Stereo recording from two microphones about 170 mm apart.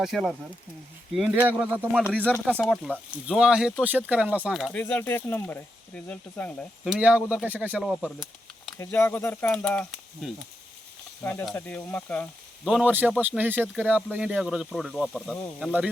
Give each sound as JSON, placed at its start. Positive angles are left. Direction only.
{"t": 0.0, "sound": "speech", "side_deg": 0}
{"t": 2.2, "sound": "speech", "side_deg": 5}
{"t": 6.8, "sound": "speech", "side_deg": -5}
{"t": 8.8, "sound": "speech", "side_deg": 15}
{"t": 12.6, "sound": "speech", "side_deg": -5}